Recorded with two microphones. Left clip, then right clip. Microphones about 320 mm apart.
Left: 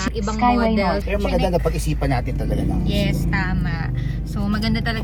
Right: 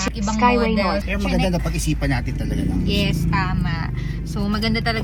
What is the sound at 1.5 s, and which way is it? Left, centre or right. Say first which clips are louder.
Speech: left 4 dB; left.